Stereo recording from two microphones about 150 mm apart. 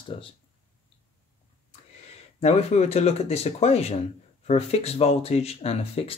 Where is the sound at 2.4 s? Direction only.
45° left (ahead or behind).